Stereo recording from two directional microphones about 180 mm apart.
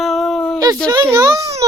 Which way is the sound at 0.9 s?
20° right (ahead or behind).